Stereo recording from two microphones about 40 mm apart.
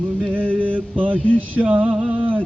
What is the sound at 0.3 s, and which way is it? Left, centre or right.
Mantra, right.